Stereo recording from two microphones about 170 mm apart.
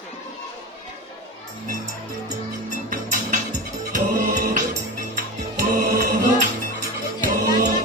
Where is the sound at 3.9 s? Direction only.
55° right (ahead or behind).